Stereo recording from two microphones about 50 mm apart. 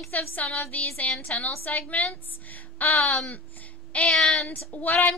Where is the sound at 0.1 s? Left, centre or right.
Left.